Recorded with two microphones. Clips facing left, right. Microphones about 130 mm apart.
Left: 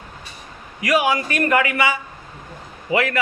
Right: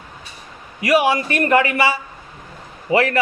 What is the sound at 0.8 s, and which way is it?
A man's voice, 30° right (ahead or behind).